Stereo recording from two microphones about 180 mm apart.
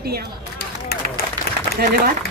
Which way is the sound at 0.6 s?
60° left (ahead or behind).